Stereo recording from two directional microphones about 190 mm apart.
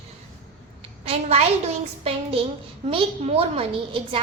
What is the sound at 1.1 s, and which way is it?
Speech, 30° right (ahead or behind).